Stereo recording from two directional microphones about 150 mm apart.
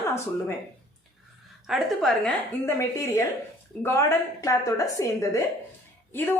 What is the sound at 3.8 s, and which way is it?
A woman's voice, 15° left (ahead or behind).